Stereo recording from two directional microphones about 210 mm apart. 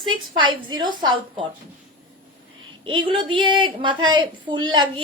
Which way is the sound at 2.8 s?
25° right (ahead or behind).